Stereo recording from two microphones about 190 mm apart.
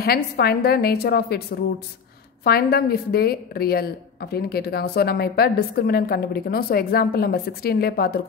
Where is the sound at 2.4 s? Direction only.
55° left (ahead or behind).